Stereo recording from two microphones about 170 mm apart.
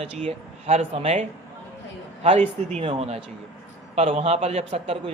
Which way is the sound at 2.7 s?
35° right (ahead or behind).